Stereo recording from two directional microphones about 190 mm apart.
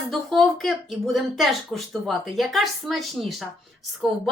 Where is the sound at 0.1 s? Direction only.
Centre (ahead or behind).